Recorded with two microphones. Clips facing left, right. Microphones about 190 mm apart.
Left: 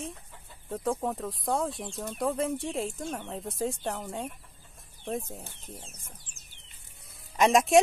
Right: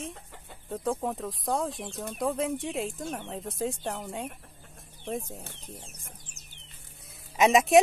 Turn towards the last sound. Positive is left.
turn(degrees=0)  # may be behind; listen again after turning